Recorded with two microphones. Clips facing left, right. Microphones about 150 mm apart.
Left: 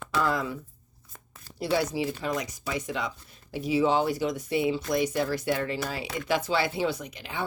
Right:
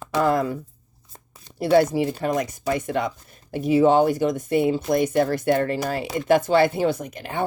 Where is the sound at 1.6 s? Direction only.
55° right (ahead or behind).